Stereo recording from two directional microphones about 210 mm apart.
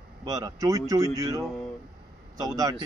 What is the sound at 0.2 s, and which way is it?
A man's voice, 15° right (ahead or behind).